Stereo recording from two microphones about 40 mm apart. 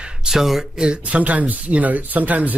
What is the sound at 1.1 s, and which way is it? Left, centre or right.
Speech, right.